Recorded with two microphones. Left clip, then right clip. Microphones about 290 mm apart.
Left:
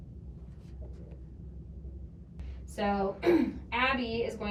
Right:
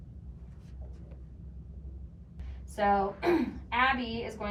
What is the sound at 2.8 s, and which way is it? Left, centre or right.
A woman's voice, centre.